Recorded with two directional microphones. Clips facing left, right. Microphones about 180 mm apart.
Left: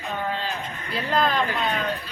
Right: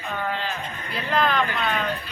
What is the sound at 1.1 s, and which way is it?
Speech, 35° left (ahead or behind).